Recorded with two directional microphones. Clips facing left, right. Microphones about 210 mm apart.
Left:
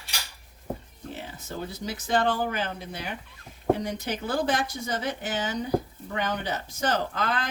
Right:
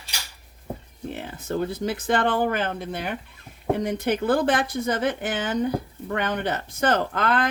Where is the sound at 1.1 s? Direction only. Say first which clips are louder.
Right 8 dB; 55° right (ahead or behind).